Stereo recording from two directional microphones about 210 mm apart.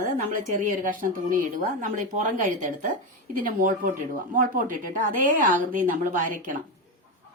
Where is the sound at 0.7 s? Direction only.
40° right (ahead or behind).